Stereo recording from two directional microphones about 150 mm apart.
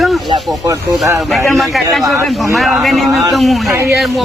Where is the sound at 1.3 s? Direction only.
Centre (ahead or behind).